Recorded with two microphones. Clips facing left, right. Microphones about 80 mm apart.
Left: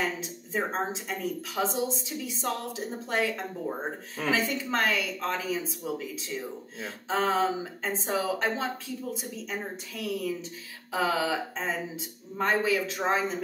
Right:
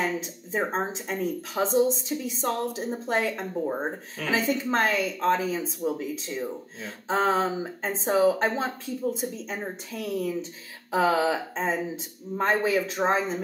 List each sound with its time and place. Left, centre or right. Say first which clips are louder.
0.5 s speech: right 2 dB; right